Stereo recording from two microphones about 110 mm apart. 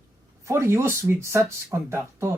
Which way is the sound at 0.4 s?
25° right (ahead or behind).